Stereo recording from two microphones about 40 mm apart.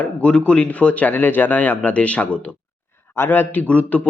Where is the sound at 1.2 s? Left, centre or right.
Left.